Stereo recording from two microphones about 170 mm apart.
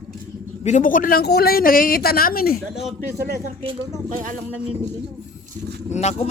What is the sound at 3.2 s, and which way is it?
Speech, 65° right (ahead or behind).